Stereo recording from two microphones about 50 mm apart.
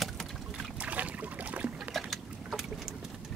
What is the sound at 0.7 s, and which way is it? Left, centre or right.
Boat, right.